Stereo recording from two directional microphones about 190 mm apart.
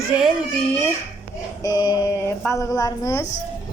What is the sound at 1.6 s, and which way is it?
Speech, 20° left (ahead or behind).